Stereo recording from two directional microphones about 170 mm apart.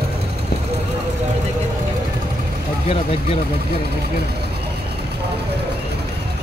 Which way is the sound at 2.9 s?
35° left (ahead or behind).